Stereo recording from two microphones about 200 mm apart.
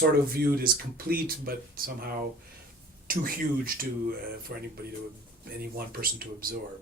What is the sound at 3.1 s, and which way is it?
A man's voice, 45° right (ahead or behind).